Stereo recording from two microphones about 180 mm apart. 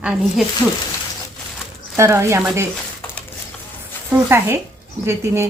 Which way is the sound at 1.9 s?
15° right (ahead or behind).